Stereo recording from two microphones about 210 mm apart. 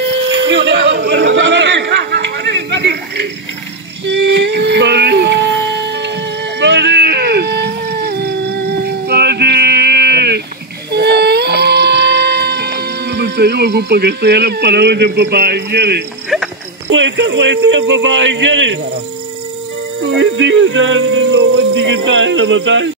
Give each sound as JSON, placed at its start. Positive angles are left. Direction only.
{"t": 0.5, "sound": "a sound", "side_deg": -60}
{"t": 10.9, "sound": "music", "side_deg": -50}
{"t": 16.9, "sound": "speech", "side_deg": -60}
{"t": 20.1, "sound": "speech", "side_deg": -60}